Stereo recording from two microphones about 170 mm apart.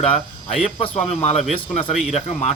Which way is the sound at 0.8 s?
40° left (ahead or behind).